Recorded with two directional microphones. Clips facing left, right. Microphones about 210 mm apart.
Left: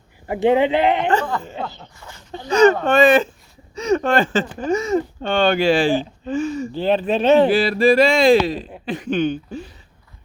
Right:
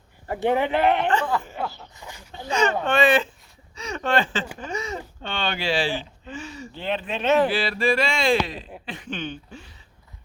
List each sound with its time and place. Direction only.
0.3 s speech: 15° left (ahead or behind)
1.0 s speech: 40° left (ahead or behind)
1.4 s speech: 20° left (ahead or behind)
2.0 s speech: 15° right (ahead or behind)
2.5 s speech: 40° left (ahead or behind)
7.5 s speech: 40° left (ahead or behind)